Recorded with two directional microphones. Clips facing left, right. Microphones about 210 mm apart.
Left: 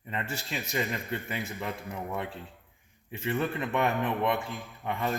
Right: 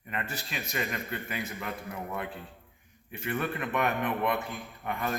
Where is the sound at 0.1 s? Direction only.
25° left (ahead or behind).